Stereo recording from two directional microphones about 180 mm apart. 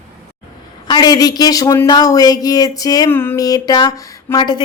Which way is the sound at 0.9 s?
20° left (ahead or behind).